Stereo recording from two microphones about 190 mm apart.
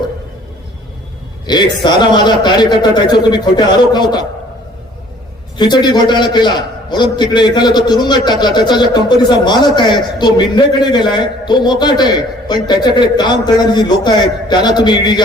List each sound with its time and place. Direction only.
1.5 s a man's voice: 20° left (ahead or behind)
5.5 s a man's voice: 25° left (ahead or behind)